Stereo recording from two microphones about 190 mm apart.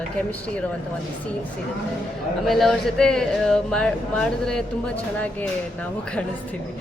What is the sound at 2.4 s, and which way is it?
Speech, centre (ahead or behind).